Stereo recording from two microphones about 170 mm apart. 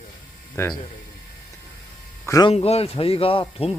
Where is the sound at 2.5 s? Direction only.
35° left (ahead or behind).